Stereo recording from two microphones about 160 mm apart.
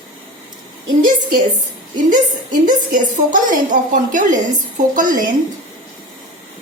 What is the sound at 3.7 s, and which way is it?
A woman's voice, 55° right (ahead or behind).